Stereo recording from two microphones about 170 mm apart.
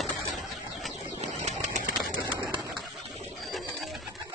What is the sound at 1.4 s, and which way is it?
Bird, 45° right (ahead or behind).